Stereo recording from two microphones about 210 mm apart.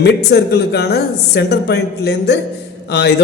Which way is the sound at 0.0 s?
50° left (ahead or behind).